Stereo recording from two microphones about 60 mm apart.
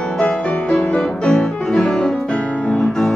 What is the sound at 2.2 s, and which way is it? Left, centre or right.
Music, left.